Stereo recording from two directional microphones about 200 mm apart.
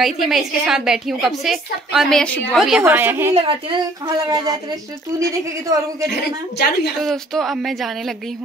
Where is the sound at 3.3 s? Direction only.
25° right (ahead or behind).